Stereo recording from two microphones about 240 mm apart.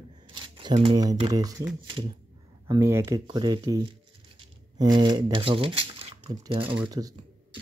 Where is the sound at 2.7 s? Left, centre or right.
Centre.